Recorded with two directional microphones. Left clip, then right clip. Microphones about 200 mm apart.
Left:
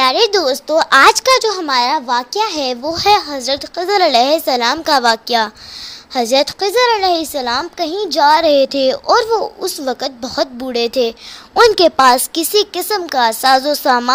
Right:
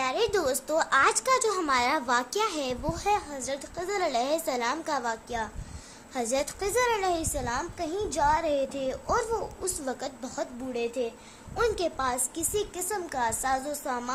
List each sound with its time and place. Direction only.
0.0 s a child's voice: 35° left (ahead or behind)
3.1 s a woman's voice: 45° left (ahead or behind)
6.1 s a woman's voice: 35° left (ahead or behind)
10.7 s a woman's voice: 55° left (ahead or behind)
12.9 s a woman's voice: 40° left (ahead or behind)